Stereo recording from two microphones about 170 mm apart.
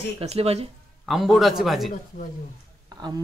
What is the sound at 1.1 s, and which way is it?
Speech, centre (ahead or behind).